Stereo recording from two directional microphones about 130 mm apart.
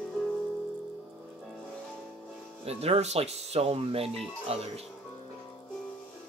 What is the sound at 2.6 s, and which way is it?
Speech, 55° right (ahead or behind).